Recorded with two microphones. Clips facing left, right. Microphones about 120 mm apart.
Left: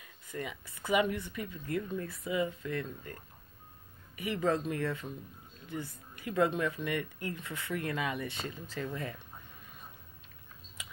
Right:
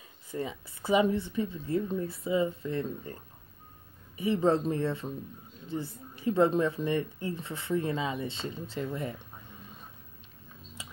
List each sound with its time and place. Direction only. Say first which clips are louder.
0.0 s speech: right 5 dB; 30° right (ahead or behind)
4.2 s speech: right 5 dB; 30° right (ahead or behind)
10.8 s a sound: right 1 dB; 30° right (ahead or behind)